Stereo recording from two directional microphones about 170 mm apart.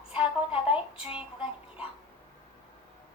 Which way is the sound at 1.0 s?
30° left (ahead or behind).